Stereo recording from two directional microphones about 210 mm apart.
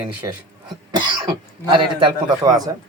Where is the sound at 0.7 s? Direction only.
20° right (ahead or behind).